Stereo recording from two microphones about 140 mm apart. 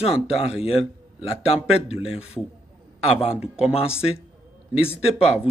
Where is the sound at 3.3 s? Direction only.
5° right (ahead or behind).